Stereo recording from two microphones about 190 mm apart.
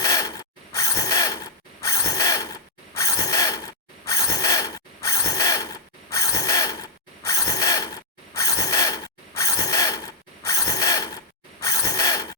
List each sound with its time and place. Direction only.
0.0 s mechanisms: 20° left (ahead or behind)